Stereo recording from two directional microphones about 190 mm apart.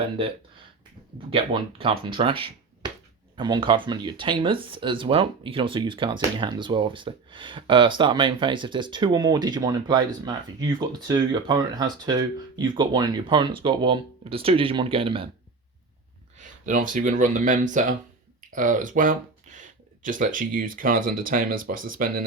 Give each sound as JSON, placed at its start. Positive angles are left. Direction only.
{"t": 0.0, "sound": "speech", "side_deg": -30}
{"t": 16.4, "sound": "speech", "side_deg": -40}